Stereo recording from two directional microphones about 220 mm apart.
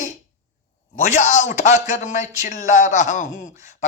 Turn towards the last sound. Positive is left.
turn(degrees=35)  # may be behind; listen again after turning